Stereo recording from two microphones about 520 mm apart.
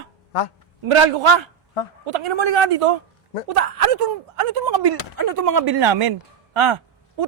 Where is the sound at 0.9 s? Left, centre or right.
Right.